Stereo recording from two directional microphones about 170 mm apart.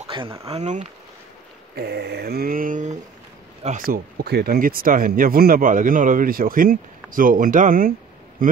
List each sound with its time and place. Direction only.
0.0 s a sound: 30° right (ahead or behind)
0.5 s speech: 40° right (ahead or behind)
1.8 s speech: 70° right (ahead or behind); by 8.5 s 55° right (ahead or behind)